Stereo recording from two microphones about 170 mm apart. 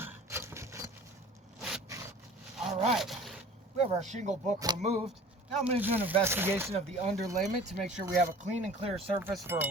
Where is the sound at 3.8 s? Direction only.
45° right (ahead or behind).